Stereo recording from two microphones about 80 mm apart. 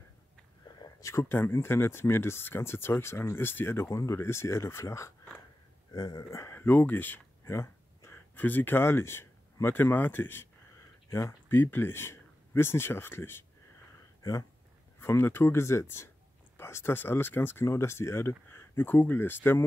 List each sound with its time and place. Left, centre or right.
1.0 s speech: left
5.9 s speech: left
6.3 s a sound: left
8.4 s speech: left
15.0 s speech: left